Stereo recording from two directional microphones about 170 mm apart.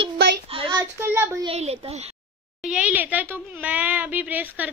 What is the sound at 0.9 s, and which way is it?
Child singing, 15° right (ahead or behind).